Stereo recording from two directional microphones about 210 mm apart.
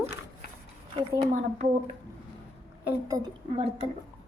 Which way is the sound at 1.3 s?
30° right (ahead or behind).